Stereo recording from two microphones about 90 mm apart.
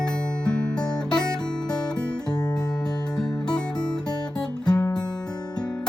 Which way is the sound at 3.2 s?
50° left (ahead or behind).